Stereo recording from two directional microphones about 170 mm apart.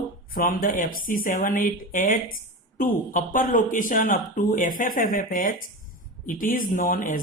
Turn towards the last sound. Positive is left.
turn(degrees=50)  # may be behind; listen again after turning